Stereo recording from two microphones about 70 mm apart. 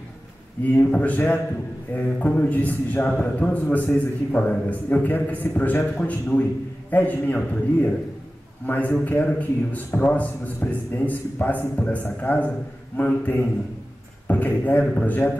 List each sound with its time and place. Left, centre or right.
0.8 s a man's voice: centre
3.9 s a man's voice: centre